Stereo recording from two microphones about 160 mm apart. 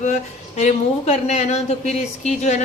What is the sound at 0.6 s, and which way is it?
Speech, 45° left (ahead or behind).